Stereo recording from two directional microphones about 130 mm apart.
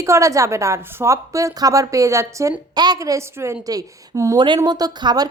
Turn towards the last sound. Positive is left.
turn(degrees=-30)  # may be behind; listen again after turning